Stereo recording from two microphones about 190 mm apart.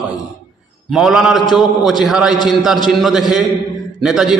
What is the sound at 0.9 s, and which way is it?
A man's voice, centre (ahead or behind).